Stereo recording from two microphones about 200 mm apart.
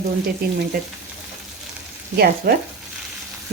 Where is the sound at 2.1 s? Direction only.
50° right (ahead or behind).